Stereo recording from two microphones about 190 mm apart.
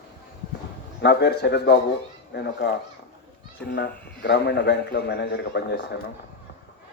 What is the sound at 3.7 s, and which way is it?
A man's voice, 55° left (ahead or behind).